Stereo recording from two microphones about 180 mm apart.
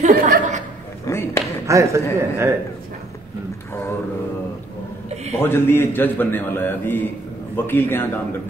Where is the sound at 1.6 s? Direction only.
15° right (ahead or behind).